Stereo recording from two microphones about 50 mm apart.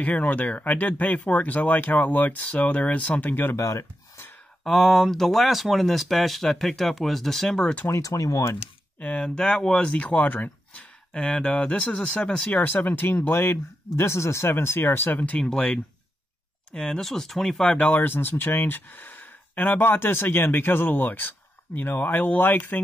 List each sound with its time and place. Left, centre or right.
0.0 s speech: left
3.5 s speech: left
4.6 s speech: centre
7.9 s speech: left
9.0 s speech: left
9.4 s speech: centre; by 10.9 s left
11.1 s speech: centre
12.4 s speech: left
13.9 s speech: left
15.1 s speech: left
16.7 s speech: centre
17.0 s speech: centre
17.6 s speech: left